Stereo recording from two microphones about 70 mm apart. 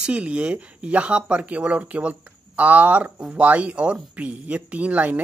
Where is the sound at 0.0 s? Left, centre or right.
Centre.